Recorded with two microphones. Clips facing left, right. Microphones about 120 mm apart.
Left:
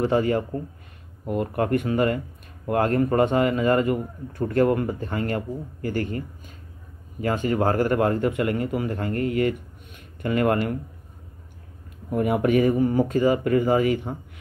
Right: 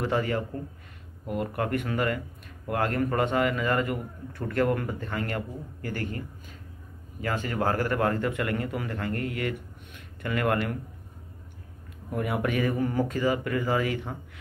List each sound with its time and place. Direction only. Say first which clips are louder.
0.0 s speech: left 6 dB; 30° left (ahead or behind)
7.4 s speech: left 6 dB; 25° left (ahead or behind)
12.1 s speech: left 7 dB; 30° left (ahead or behind)
13.3 s speech: left 7 dB; 35° left (ahead or behind)